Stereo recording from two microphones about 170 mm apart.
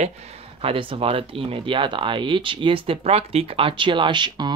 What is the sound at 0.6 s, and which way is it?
Speech, 35° right (ahead or behind).